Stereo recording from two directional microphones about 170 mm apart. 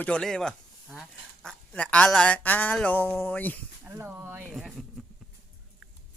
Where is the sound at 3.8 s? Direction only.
15° right (ahead or behind).